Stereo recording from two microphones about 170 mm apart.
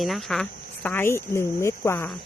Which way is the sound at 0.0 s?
Centre (ahead or behind).